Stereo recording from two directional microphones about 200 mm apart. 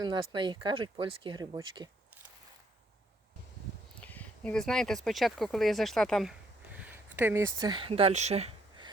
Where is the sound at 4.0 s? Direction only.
10° left (ahead or behind).